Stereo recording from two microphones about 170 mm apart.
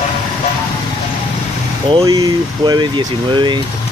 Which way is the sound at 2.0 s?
20° right (ahead or behind).